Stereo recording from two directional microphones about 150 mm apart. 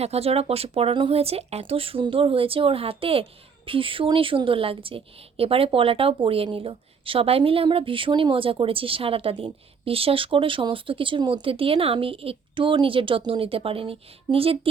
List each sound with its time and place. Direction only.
0.0 s a woman's voice: 45° right (ahead or behind)